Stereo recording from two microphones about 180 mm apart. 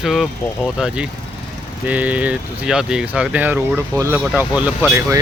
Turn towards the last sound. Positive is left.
turn(degrees=-10)  # may be behind; listen again after turning